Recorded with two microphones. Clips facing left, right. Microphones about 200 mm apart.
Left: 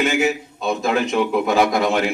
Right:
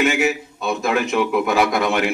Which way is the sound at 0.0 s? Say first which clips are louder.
Even; 30° left (ahead or behind).